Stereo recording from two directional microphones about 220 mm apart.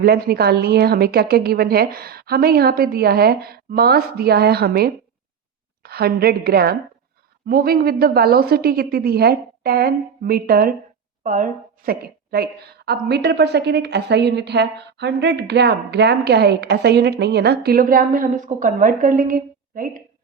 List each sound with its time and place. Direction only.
0.0 s a woman's voice: 45° right (ahead or behind)